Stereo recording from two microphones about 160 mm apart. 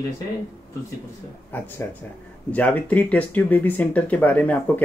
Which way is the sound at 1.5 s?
10° left (ahead or behind).